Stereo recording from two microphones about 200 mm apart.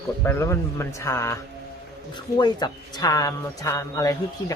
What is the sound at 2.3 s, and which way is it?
Speech, 20° left (ahead or behind).